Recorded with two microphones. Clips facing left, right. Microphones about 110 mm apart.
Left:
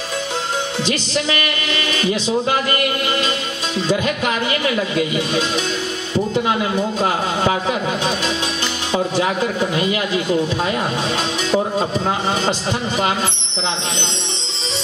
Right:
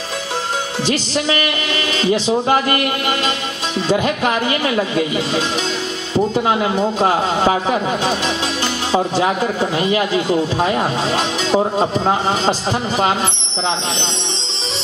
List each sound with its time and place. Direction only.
0.8 s a man's voice: 20° right (ahead or behind)
3.9 s a man's voice: 25° right (ahead or behind)
9.2 s a man's voice: 25° right (ahead or behind)